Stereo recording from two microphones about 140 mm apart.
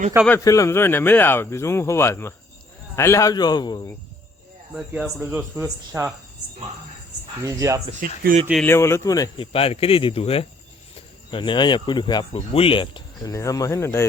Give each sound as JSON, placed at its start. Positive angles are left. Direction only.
{"t": 0.3, "sound": "a man's voice", "side_deg": 20}
{"t": 4.7, "sound": "a man's voice", "side_deg": -5}
{"t": 7.4, "sound": "speech", "side_deg": -20}
{"t": 8.0, "sound": "speech", "side_deg": -90}
{"t": 8.6, "sound": "a man's voice", "side_deg": 20}
{"t": 9.4, "sound": "speech", "side_deg": 45}
{"t": 13.3, "sound": "a man's voice", "side_deg": 25}